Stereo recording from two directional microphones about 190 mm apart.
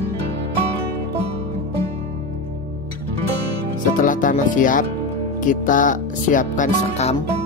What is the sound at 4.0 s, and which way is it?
Music, 45° left (ahead or behind).